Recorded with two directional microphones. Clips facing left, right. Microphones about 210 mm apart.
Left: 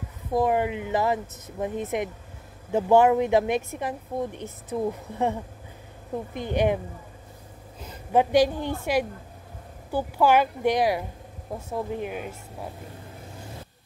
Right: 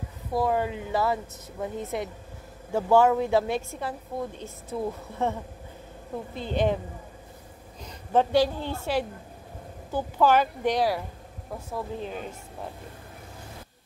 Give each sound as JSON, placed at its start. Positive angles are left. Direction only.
{"t": 0.3, "sound": "a woman's voice", "side_deg": 20}
{"t": 6.3, "sound": "a woman's voice", "side_deg": 15}
{"t": 7.8, "sound": "a woman's voice", "side_deg": 10}